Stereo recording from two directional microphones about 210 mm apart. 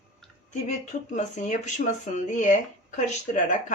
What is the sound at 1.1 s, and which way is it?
Speech, 35° left (ahead or behind).